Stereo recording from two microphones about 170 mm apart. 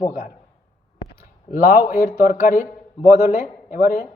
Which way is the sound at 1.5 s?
60° left (ahead or behind).